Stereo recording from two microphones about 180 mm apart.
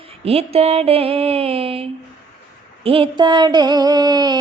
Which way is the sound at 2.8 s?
30° right (ahead or behind).